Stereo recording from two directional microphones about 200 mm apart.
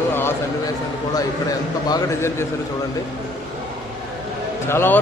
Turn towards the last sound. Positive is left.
turn(degrees=10)  # may be behind; listen again after turning